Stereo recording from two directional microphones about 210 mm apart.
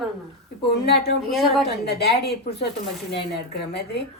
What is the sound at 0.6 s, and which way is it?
Speech, 50° left (ahead or behind).